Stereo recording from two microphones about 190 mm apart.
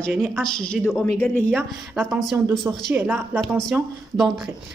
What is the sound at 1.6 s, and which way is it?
A woman's voice, 10° right (ahead or behind).